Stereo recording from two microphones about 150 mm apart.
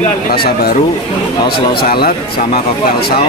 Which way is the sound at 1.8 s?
90° left.